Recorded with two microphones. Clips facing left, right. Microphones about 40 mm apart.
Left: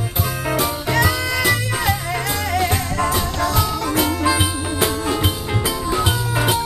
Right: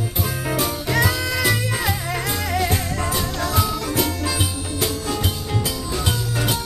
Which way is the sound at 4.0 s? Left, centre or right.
Centre.